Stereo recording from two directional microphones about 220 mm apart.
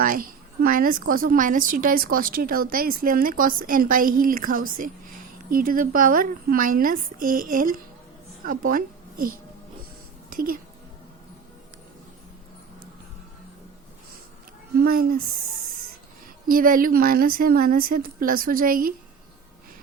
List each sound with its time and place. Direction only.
0.0 s a woman's voice: 40° right (ahead or behind)
14.8 s a woman's voice: 40° right (ahead or behind)
16.5 s a woman's voice: 40° right (ahead or behind)